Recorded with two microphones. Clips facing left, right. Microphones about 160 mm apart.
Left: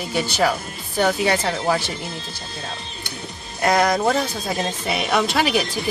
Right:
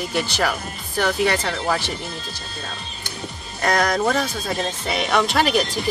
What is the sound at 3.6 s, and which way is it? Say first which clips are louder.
Speech: left 2 dB; 5° left (ahead or behind).